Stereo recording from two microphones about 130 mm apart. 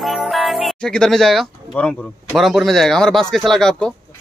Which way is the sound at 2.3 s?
Centre (ahead or behind).